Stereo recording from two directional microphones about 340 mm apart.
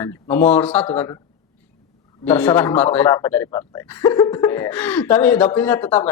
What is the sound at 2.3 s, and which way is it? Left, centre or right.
Speech, centre.